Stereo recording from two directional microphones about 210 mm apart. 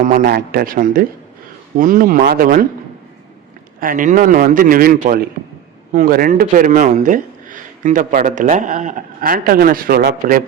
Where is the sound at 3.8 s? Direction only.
40° right (ahead or behind).